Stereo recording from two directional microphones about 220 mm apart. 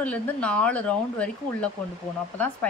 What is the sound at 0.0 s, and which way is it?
Speech, 5° left (ahead or behind).